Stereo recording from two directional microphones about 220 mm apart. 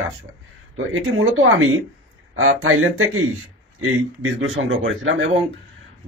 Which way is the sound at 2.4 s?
70° right (ahead or behind).